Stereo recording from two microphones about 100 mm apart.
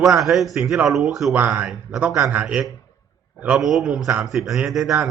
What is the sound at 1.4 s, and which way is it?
A man's voice, 15° right (ahead or behind).